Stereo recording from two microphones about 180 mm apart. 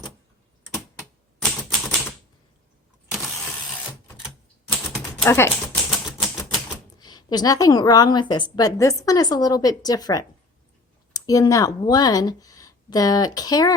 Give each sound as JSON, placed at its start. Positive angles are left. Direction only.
{"t": 1.4, "sound": "typewriter", "side_deg": 5}
{"t": 3.1, "sound": "vehicle", "side_deg": 0}
{"t": 4.7, "sound": "typing", "side_deg": 10}
{"t": 5.6, "sound": "typewriter", "side_deg": 0}
{"t": 7.0, "sound": "a woman's voice", "side_deg": 20}